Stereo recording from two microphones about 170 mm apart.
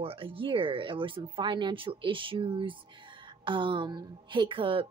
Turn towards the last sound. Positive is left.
turn(degrees=-30)  # may be behind; listen again after turning